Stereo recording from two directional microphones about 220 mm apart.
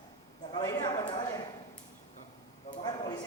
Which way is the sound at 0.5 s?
15° left (ahead or behind).